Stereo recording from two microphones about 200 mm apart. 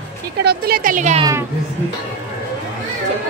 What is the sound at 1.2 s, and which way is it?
Speech, 15° right (ahead or behind).